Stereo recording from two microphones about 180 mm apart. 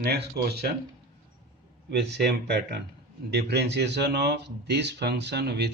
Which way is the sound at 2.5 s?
65° right (ahead or behind).